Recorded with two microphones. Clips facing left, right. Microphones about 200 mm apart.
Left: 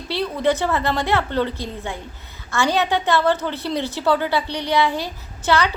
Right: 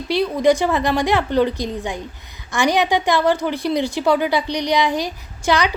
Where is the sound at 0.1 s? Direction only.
15° right (ahead or behind).